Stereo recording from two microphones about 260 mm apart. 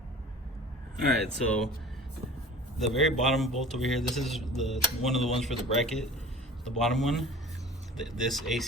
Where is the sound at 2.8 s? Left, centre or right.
Centre.